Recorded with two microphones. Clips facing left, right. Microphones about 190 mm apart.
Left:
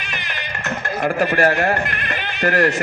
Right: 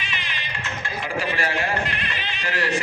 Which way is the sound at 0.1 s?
50° left (ahead or behind).